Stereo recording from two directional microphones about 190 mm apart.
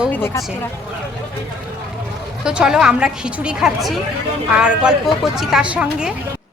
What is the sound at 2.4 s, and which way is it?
A woman's voice, 5° right (ahead or behind).